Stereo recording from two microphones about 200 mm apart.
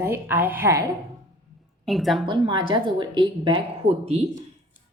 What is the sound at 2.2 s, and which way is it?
A woman's voice, 25° right (ahead or behind).